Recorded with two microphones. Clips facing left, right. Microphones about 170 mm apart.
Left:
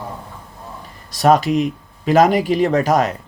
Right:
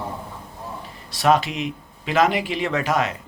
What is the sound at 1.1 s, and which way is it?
Speech, 40° left (ahead or behind).